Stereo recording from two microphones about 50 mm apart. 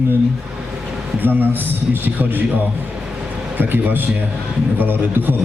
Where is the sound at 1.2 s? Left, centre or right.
Right.